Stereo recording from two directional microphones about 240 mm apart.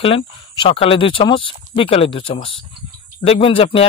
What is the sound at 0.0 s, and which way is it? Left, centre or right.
Speech, left.